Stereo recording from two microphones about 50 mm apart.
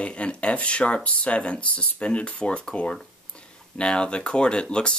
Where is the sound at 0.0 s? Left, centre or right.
Left.